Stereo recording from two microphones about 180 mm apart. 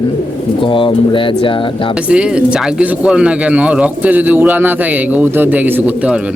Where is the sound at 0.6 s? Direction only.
25° left (ahead or behind).